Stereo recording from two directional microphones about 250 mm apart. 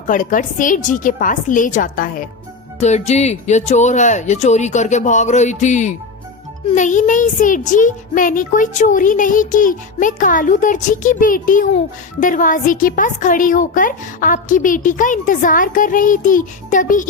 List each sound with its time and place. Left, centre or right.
0.1 s a child's voice: left